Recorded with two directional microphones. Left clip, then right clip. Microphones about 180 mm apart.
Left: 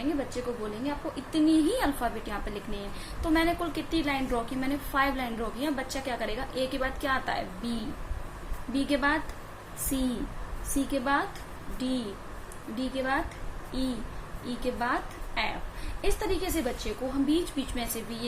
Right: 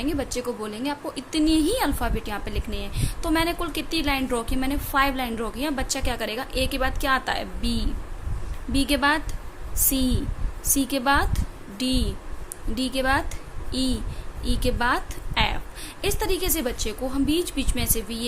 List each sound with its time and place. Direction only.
0.4 s a woman's voice: 45° right (ahead or behind)